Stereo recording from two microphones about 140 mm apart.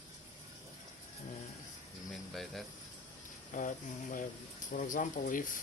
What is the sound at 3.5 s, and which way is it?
Speech, 70° left (ahead or behind).